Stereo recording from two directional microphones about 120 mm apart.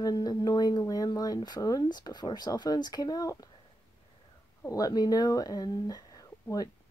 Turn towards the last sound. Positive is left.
turn(degrees=30)  # may be behind; listen again after turning